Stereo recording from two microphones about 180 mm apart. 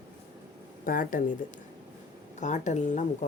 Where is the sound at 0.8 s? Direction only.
50° left (ahead or behind).